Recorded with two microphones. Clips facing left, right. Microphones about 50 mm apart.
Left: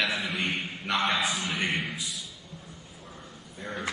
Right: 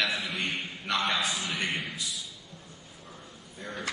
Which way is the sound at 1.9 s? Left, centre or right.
Left.